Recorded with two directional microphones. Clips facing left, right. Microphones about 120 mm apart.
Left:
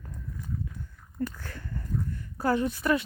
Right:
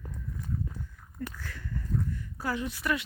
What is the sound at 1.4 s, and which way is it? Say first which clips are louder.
Speech: even; 45° left (ahead or behind).